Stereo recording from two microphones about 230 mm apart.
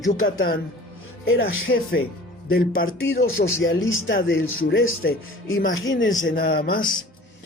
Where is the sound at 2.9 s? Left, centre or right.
Left.